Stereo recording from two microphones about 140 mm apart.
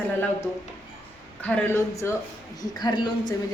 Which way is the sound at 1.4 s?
10° left (ahead or behind).